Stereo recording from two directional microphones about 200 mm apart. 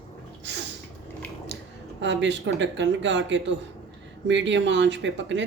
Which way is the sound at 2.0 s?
65° right (ahead or behind).